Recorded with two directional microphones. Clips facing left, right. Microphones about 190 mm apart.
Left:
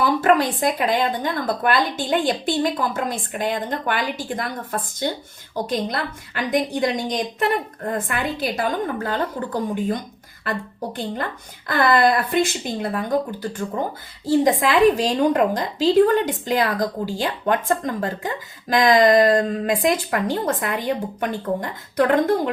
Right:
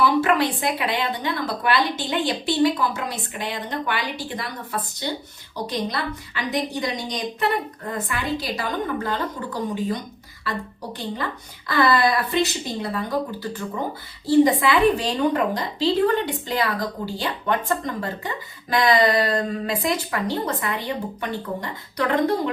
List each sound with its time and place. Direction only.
0.0 s a woman's voice: 45° left (ahead or behind)
11.7 s a woman's voice: 50° left (ahead or behind)